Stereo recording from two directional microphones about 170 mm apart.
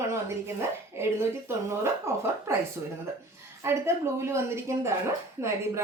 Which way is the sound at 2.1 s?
15° right (ahead or behind).